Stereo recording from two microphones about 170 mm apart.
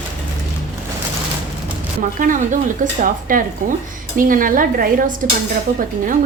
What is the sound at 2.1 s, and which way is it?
Speech, 50° right (ahead or behind).